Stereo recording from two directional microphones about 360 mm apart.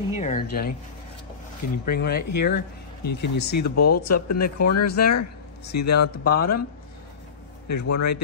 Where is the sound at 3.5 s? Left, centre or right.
Left.